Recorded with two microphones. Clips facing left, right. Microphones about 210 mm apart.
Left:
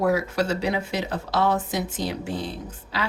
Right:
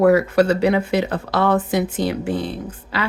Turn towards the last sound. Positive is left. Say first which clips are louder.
# right 5 dB
turn(degrees=-60)  # may be behind; listen again after turning